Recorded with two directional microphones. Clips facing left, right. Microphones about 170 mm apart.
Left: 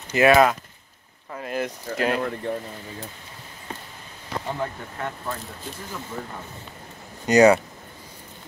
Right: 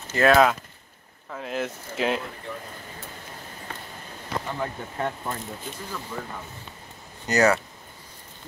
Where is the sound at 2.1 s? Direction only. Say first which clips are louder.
Left 7 dB; 60° left (ahead or behind).